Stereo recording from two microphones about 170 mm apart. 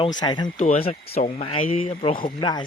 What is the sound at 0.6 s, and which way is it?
Speech, 40° left (ahead or behind).